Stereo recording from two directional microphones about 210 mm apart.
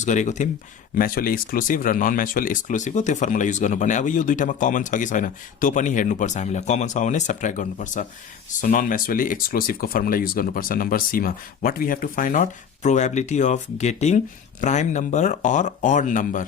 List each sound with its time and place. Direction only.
0.0 s speech: 35° left (ahead or behind)